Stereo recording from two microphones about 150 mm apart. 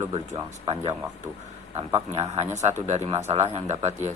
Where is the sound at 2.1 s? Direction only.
45° right (ahead or behind).